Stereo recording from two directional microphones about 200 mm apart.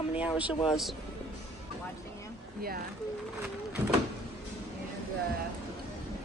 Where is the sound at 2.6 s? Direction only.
45° right (ahead or behind).